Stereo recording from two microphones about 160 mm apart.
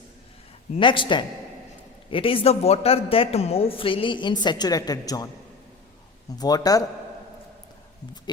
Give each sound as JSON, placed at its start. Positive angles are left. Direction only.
{"t": 0.8, "sound": "a woman's voice", "side_deg": 30}
{"t": 6.4, "sound": "a woman's voice", "side_deg": 25}